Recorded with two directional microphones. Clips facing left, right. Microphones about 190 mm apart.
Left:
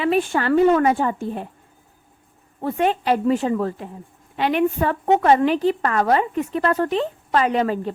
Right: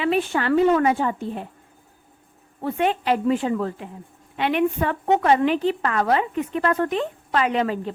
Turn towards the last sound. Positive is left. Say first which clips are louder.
# left 2 dB
turn(degrees=40)  # may be behind; listen again after turning